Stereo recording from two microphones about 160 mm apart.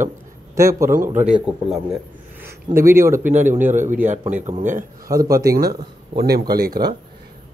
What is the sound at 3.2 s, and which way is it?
A man's voice, 50° right (ahead or behind).